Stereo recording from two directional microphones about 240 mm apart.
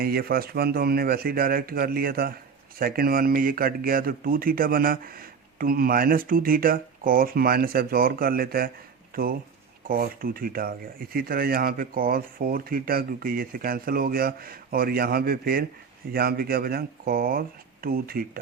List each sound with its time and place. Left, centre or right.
0.0 s speech: right